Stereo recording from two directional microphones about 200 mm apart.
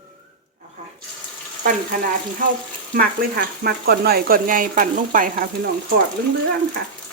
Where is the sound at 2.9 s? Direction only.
50° right (ahead or behind).